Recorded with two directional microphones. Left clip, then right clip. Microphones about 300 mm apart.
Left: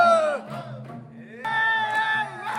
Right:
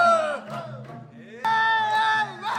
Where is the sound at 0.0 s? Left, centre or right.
Centre.